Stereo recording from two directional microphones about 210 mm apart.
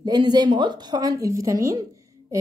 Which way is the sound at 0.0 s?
20° right (ahead or behind).